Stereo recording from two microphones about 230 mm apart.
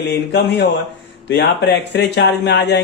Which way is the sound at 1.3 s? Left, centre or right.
Left.